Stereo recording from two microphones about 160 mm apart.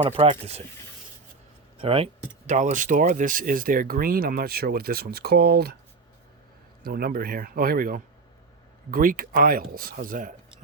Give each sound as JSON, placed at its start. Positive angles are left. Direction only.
{"t": 0.2, "sound": "speech", "side_deg": -40}
{"t": 1.8, "sound": "speech", "side_deg": -35}
{"t": 2.5, "sound": "speech", "side_deg": -50}
{"t": 6.8, "sound": "speech", "side_deg": -70}